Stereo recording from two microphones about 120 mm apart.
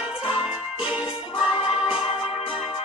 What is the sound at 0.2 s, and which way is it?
Music, 5° right (ahead or behind).